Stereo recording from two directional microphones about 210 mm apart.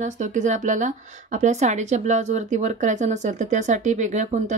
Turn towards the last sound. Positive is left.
turn(degrees=-35)  # may be behind; listen again after turning